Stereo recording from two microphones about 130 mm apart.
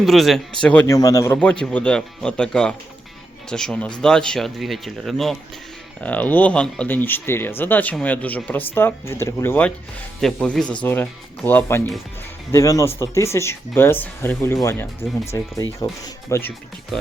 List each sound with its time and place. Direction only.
0.0 s speech: centre (ahead or behind)
0.9 s speech: 25° left (ahead or behind)
1.4 s speech: 10° left (ahead or behind); by 16.4 s 25° left (ahead or behind)
16.9 s speech: 5° left (ahead or behind)